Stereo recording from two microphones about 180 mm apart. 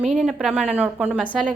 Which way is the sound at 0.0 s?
Centre (ahead or behind).